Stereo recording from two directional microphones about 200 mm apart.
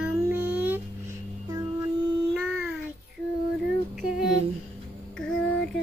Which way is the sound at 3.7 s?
Centre (ahead or behind).